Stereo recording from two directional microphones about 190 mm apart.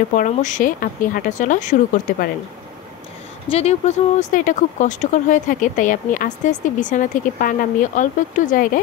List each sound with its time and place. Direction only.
0.1 s speech: 40° left (ahead or behind)
3.4 s speech: 35° left (ahead or behind)